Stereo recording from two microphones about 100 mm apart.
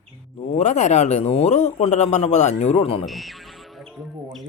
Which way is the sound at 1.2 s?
90° left.